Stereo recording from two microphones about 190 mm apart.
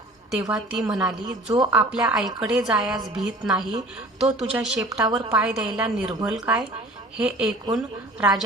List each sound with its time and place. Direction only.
0.5 s a woman's voice: 5° right (ahead or behind)
5.0 s a woman's voice: 20° right (ahead or behind)
5.3 s a woman's voice: 5° right (ahead or behind)